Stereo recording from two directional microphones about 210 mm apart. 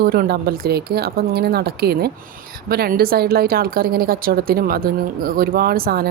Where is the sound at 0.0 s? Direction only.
45° right (ahead or behind).